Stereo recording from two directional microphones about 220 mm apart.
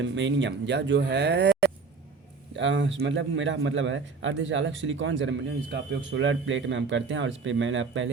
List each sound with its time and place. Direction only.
0.0 s a man's voice: 55° right (ahead or behind)